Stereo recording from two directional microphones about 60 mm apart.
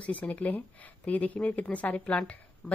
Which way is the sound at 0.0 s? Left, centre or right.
Left.